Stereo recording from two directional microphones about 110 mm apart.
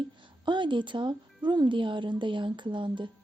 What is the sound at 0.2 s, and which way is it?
A woman's voice, 45° right (ahead or behind).